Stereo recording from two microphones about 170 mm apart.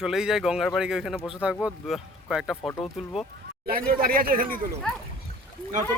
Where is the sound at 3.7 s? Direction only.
60° right (ahead or behind).